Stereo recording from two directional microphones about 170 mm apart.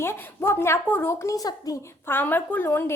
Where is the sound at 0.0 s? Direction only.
15° left (ahead or behind).